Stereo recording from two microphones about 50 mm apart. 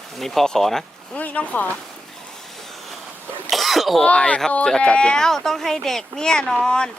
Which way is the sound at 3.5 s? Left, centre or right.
Centre.